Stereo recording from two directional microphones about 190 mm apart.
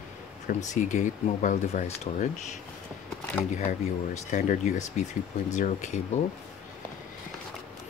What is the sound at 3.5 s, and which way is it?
Speech, 40° left (ahead or behind).